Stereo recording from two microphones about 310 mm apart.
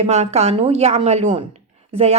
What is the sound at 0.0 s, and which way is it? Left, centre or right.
Speech, right.